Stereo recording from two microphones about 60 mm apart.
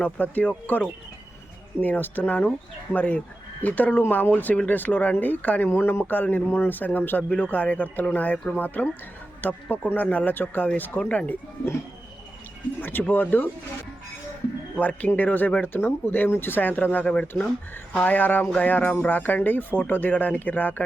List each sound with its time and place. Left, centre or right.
0.0 s speech: left
5.7 s speech: left
12.8 s speech: left
14.8 s speech: left